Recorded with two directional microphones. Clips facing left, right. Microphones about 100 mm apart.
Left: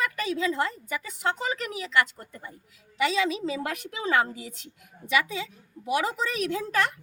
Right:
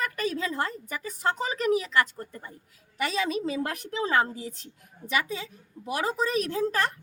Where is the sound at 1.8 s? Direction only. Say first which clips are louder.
Even; 30° right (ahead or behind).